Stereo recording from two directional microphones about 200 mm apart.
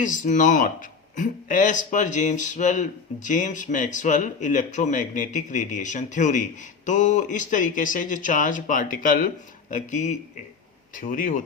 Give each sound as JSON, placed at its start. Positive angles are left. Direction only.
{"t": 0.0, "sound": "speech", "side_deg": 40}